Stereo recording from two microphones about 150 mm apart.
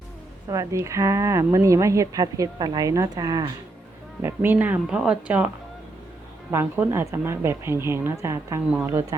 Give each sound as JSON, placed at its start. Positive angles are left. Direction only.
{"t": 0.4, "sound": "a woman's voice", "side_deg": -20}
{"t": 4.2, "sound": "a woman's voice", "side_deg": -15}
{"t": 6.5, "sound": "a woman's voice", "side_deg": -15}